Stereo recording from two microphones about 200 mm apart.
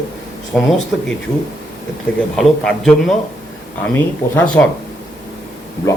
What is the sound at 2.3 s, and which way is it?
A man's voice, 5° left (ahead or behind).